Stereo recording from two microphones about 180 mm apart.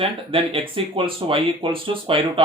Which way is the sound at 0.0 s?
30° right (ahead or behind).